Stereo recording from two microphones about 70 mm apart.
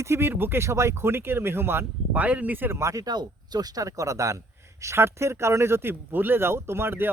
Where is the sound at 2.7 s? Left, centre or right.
Right.